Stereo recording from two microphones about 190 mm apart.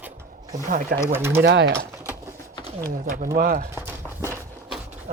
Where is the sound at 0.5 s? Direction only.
45° right (ahead or behind).